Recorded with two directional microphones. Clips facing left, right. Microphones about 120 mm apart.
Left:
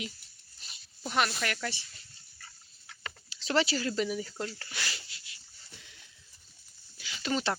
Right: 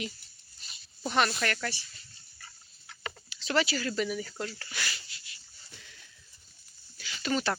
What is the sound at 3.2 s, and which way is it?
Speech, 30° left (ahead or behind).